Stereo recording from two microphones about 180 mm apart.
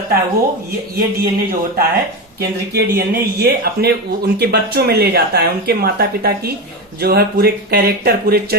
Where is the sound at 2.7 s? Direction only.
60° right (ahead or behind).